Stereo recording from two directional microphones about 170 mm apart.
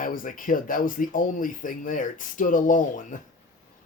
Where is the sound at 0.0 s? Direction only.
55° left (ahead or behind).